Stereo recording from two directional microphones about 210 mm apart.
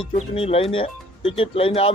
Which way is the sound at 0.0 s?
30° left (ahead or behind).